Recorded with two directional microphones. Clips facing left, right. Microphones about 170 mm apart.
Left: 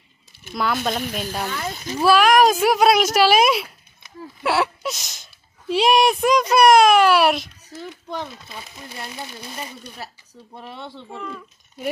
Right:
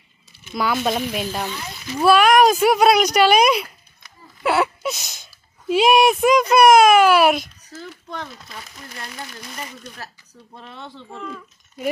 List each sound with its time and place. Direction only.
0.5 s speech: centre (ahead or behind)
1.5 s a child's voice: 50° left (ahead or behind)
2.0 s speech: centre (ahead or behind)
4.4 s a sound: centre (ahead or behind)
5.6 s speech: centre (ahead or behind)
8.2 s speech: 25° left (ahead or behind)
10.6 s speech: 5° left (ahead or behind)